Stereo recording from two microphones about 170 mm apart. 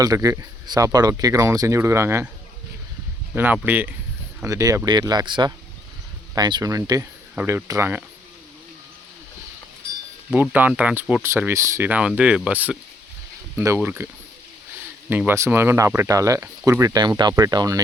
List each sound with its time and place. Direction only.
0.0 s speech: 20° right (ahead or behind)
3.3 s speech: 10° right (ahead or behind)
10.3 s speech: 10° right (ahead or behind)
15.1 s speech: 10° right (ahead or behind)